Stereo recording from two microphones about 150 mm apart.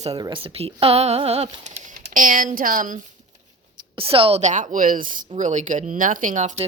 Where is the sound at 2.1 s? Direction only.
65° right (ahead or behind).